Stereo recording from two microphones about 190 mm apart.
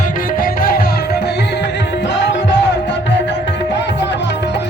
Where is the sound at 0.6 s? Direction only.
50° left (ahead or behind).